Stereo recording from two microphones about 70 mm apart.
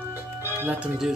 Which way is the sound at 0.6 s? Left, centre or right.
Centre.